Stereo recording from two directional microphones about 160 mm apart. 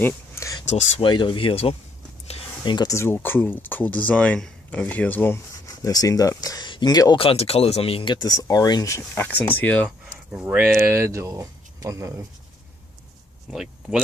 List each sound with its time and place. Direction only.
0.0 s a sound: 15° left (ahead or behind)
0.7 s speech: 35° left (ahead or behind); by 9.9 s 10° left (ahead or behind)
10.3 s speech: 5° right (ahead or behind)
10.8 s speech: 15° right (ahead or behind)
13.5 s speech: 5° right (ahead or behind)